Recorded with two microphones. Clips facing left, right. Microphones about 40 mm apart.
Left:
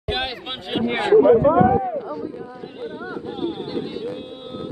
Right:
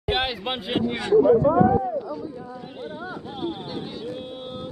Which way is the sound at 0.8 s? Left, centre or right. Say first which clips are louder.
Left 5 dB; left.